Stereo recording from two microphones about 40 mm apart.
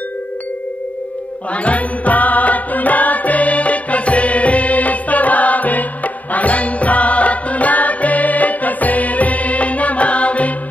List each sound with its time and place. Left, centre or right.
1.5 s music: left